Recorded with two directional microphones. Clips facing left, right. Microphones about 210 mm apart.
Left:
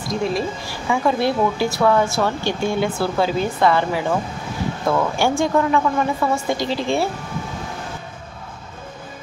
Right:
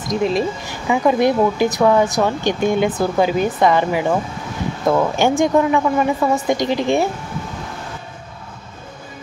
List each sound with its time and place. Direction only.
0.1 s speech: 20° right (ahead or behind)